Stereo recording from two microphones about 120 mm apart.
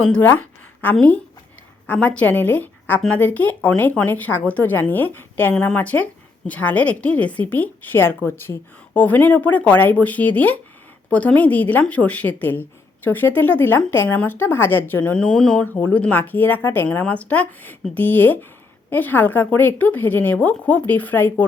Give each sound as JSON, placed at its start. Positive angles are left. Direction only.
{"t": 0.0, "sound": "a woman's voice", "side_deg": 15}